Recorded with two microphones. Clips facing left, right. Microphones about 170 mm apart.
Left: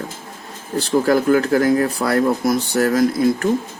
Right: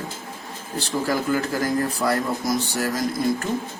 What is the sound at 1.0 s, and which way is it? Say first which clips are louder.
Speech: left 7 dB; 60° left (ahead or behind).